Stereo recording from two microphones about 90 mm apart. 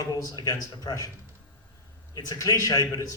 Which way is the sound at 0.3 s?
45° left (ahead or behind).